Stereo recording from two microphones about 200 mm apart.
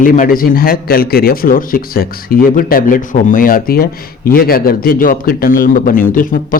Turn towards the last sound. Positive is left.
turn(degrees=45)  # may be behind; listen again after turning